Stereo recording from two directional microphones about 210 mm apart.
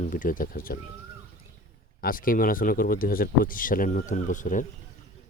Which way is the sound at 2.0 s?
40° left (ahead or behind).